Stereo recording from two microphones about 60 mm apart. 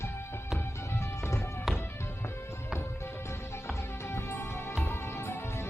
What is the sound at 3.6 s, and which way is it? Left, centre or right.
Music, left.